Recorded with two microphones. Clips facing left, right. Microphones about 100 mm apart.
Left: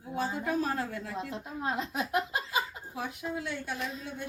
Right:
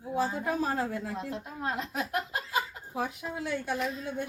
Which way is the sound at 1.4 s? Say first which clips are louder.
Left 1 dB; 5° left (ahead or behind).